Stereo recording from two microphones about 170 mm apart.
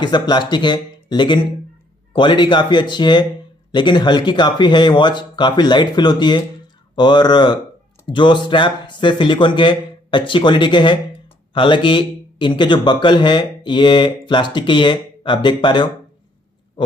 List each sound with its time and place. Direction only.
0.0 s speech: 25° left (ahead or behind)